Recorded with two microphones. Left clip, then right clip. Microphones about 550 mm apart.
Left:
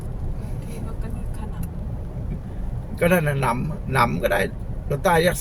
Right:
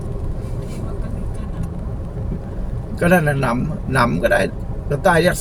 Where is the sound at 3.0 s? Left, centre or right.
Left.